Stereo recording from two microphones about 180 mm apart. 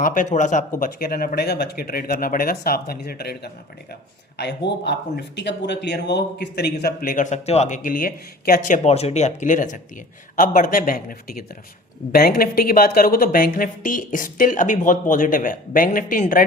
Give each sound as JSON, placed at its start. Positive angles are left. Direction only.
{"t": 0.0, "sound": "speech", "side_deg": 45}
{"t": 4.4, "sound": "speech", "side_deg": 70}
{"t": 7.0, "sound": "a woman's voice", "side_deg": 45}